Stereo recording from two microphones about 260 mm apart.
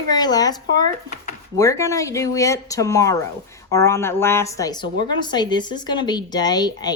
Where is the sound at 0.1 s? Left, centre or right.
Centre.